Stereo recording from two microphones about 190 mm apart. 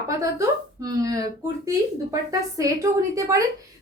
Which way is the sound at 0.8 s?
20° right (ahead or behind).